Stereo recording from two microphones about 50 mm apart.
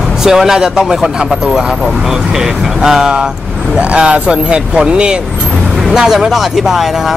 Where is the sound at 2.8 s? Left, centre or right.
Centre.